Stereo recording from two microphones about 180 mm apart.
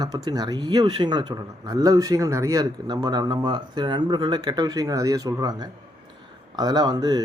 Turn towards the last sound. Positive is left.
turn(degrees=-20)  # may be behind; listen again after turning